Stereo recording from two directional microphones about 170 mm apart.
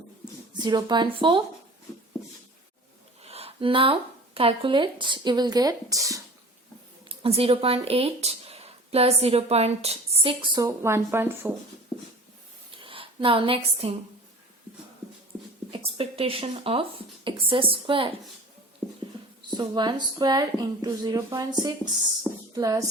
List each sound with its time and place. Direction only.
0.6 s speech: 25° right (ahead or behind)
3.2 s a sound: 35° right (ahead or behind)
4.4 s speech: 30° right (ahead or behind)
7.1 s speech: 35° right (ahead or behind)
10.8 s speech: 15° right (ahead or behind)
12.7 s speech: 30° right (ahead or behind)
15.8 s a woman's voice: 35° right (ahead or behind)
19.4 s speech: 25° right (ahead or behind)
22.5 s speech: 20° right (ahead or behind)